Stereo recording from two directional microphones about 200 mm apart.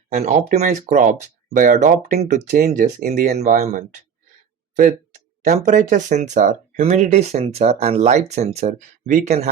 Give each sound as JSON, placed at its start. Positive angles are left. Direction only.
{"t": 0.1, "sound": "speech", "side_deg": -35}